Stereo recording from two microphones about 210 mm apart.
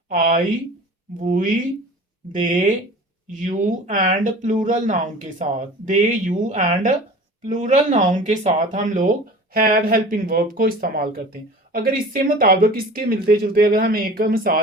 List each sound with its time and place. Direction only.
1.1 s speech: 40° right (ahead or behind)